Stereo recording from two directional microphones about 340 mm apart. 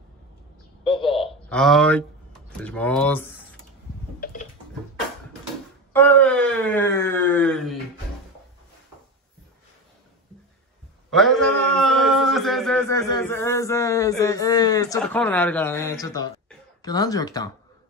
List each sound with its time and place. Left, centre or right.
0.9 s a man's voice: centre
1.5 s speech: centre
4.2 s a sound: left
5.9 s speech: centre
11.1 s a man's voice: centre